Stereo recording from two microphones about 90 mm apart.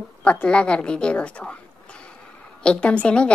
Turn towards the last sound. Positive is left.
turn(degrees=10)  # may be behind; listen again after turning